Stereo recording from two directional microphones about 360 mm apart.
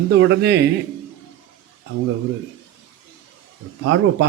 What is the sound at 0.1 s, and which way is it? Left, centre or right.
Speech, right.